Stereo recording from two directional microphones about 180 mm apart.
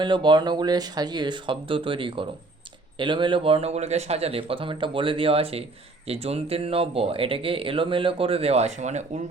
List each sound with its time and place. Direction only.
0.0 s speech: 25° right (ahead or behind)